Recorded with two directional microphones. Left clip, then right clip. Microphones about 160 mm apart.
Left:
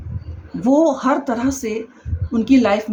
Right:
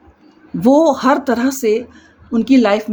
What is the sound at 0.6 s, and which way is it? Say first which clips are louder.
Speech: right 4 dB; 55° right (ahead or behind).